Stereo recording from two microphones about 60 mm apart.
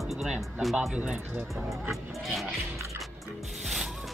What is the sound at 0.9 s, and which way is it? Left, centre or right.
Speech, centre.